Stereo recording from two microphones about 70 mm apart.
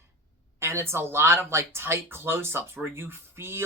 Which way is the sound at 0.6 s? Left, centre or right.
Right.